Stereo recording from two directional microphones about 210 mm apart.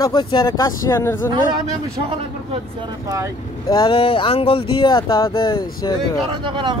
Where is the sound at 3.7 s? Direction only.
25° left (ahead or behind).